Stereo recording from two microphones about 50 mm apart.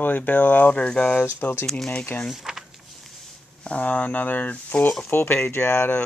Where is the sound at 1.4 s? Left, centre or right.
Left.